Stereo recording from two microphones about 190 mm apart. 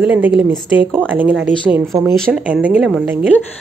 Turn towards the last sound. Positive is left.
turn(degrees=-5)  # may be behind; listen again after turning